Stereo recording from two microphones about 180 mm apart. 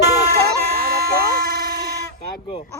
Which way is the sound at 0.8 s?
60° right (ahead or behind).